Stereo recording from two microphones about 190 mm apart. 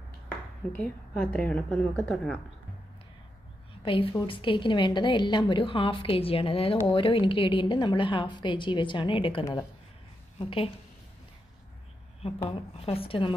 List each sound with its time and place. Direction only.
0.7 s a woman's voice: 5° left (ahead or behind)
3.8 s a woman's voice: 30° left (ahead or behind)
12.2 s a woman's voice: 30° left (ahead or behind)